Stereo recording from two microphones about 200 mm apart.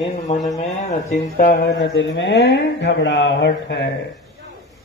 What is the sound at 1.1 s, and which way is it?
Speech, 50° left (ahead or behind).